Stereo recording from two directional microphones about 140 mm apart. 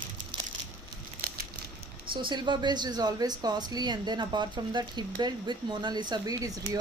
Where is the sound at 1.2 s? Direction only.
90° right.